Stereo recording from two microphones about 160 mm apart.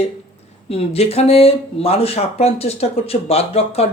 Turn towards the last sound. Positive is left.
turn(degrees=40)  # may be behind; listen again after turning